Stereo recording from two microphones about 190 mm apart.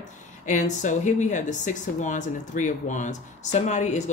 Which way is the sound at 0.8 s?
40° left (ahead or behind).